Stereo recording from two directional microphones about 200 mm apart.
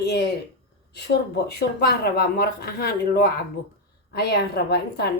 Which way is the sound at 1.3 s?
55° left (ahead or behind).